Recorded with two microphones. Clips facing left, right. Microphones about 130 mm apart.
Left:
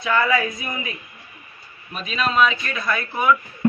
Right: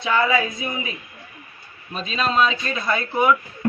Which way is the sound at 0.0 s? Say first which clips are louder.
Even; 25° right (ahead or behind).